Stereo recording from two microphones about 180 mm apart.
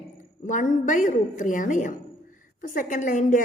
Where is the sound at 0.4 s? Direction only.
45° left (ahead or behind).